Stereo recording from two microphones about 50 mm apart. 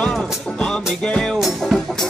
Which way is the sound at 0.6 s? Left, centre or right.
Centre.